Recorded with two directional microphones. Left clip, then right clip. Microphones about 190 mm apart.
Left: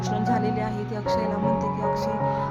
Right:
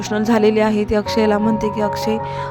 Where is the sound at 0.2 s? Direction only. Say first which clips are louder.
Right 12 dB; 40° right (ahead or behind).